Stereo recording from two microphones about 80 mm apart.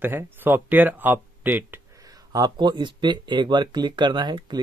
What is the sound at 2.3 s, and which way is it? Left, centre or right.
Speech, right.